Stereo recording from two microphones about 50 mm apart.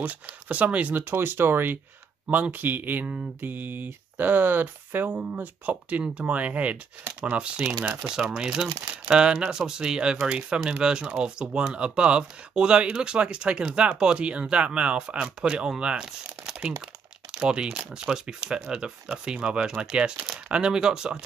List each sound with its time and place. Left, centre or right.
0.0 s speech: right
0.9 s speech: right; by 21.2 s centre